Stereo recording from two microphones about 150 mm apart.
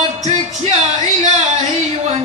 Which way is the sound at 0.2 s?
45° right (ahead or behind).